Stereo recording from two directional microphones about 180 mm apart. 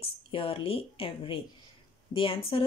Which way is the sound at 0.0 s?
30° left (ahead or behind).